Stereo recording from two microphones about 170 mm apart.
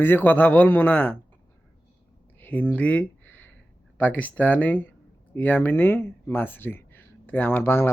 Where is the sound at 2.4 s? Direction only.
10° left (ahead or behind).